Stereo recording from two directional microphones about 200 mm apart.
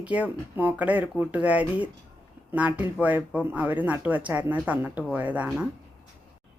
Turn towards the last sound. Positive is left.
turn(degrees=-5)  # may be behind; listen again after turning